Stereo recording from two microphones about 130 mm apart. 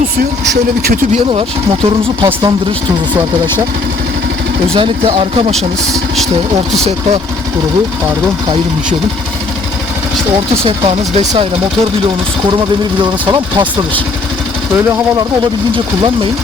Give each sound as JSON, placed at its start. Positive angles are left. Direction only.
{"t": 1.3, "sound": "speech", "side_deg": -45}
{"t": 4.7, "sound": "speech", "side_deg": -45}
{"t": 13.0, "sound": "speech", "side_deg": -35}